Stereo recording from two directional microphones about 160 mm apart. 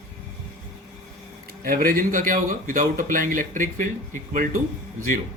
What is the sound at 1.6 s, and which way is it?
Speech, 65° right (ahead or behind).